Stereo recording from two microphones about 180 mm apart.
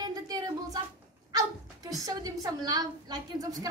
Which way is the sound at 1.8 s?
20° right (ahead or behind).